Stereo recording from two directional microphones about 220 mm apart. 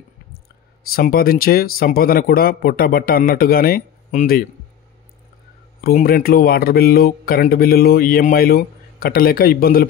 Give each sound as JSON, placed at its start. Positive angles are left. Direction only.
{"t": 0.9, "sound": "speech", "side_deg": 45}
{"t": 5.8, "sound": "speech", "side_deg": 40}